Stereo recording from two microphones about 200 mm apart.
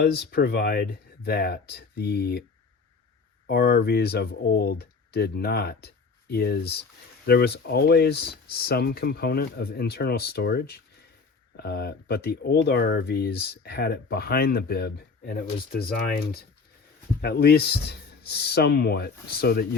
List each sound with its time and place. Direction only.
0.0 s speech: 50° left (ahead or behind)
3.4 s speech: 55° left (ahead or behind)